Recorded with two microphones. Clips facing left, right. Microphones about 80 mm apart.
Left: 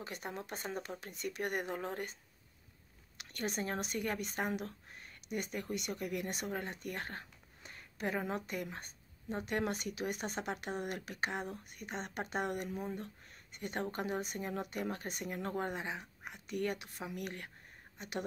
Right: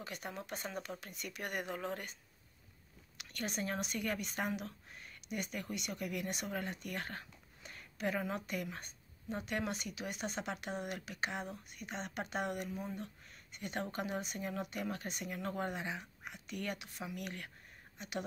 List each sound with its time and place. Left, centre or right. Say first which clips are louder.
0.0 s speech: left 2 dB; left
3.2 s speech: left 2 dB; left